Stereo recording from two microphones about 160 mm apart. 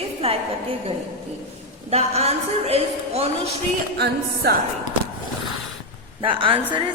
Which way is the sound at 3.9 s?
90° right.